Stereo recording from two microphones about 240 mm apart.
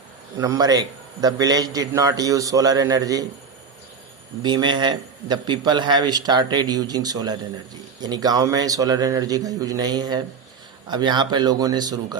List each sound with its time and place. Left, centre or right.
0.3 s a man's voice: centre
4.4 s a man's voice: centre